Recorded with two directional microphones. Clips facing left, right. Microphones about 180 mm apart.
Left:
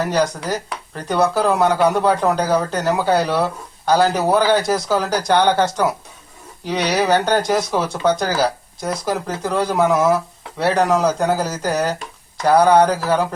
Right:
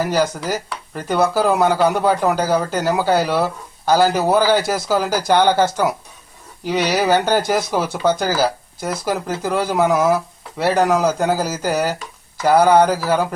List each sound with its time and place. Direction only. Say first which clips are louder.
0.0 s speech: even; 5° right (ahead or behind)